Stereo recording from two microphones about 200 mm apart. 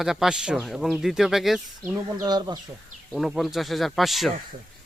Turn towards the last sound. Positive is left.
turn(degrees=0)  # may be behind; listen again after turning